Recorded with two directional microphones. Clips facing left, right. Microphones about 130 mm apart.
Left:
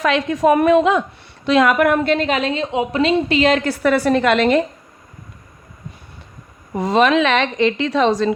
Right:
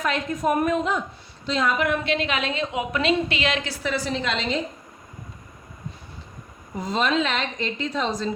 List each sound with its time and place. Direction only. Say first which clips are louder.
0.0 s a woman's voice: left 8 dB; 90° left
1.5 s a woman's voice: left 9 dB; 75° left (ahead or behind)
2.0 s a woman's voice: left 7 dB; 45° left (ahead or behind); by 4.6 s 65° left (ahead or behind)
6.7 s a woman's voice: left 8 dB; 75° left (ahead or behind)